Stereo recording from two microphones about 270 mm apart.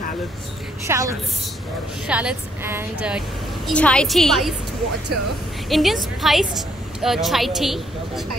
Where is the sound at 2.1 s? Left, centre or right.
Centre.